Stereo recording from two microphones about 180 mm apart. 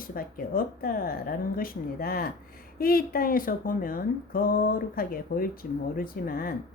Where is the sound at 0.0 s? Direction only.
55° left (ahead or behind).